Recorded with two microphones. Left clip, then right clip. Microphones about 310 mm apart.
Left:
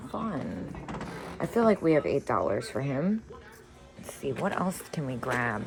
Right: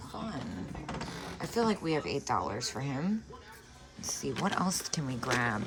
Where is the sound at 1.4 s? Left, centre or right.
Centre.